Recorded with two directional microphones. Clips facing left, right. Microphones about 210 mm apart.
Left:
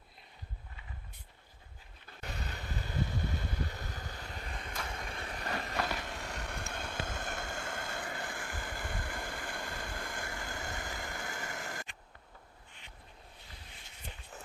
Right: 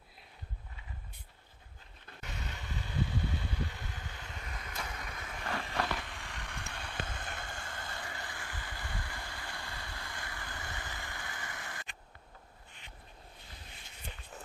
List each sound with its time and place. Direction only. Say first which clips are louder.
2.2 s vehicle: left 2 dB; 35° left (ahead or behind)